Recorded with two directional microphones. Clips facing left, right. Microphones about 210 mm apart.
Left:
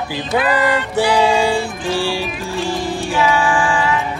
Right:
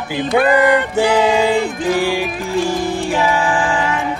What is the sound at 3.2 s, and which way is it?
Music, 35° right (ahead or behind).